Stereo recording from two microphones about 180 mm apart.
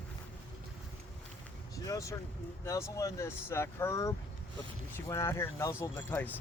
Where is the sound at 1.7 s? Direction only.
20° left (ahead or behind).